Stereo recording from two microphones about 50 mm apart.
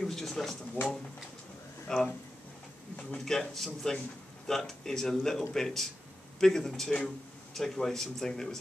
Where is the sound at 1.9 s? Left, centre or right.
Centre.